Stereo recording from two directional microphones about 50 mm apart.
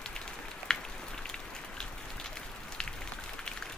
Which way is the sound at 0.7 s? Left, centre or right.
Centre.